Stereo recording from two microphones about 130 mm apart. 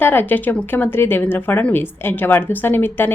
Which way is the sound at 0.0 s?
15° left (ahead or behind).